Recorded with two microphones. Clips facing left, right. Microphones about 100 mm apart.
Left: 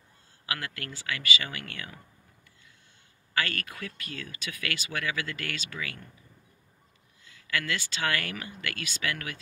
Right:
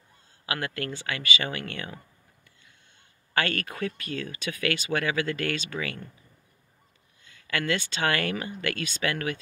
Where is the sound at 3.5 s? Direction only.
35° right (ahead or behind).